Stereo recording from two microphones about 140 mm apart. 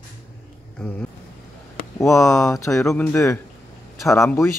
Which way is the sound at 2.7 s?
10° left (ahead or behind).